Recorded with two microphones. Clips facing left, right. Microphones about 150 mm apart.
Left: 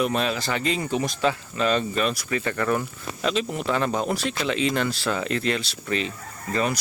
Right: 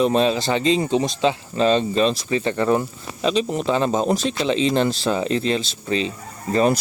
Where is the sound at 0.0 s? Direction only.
25° right (ahead or behind).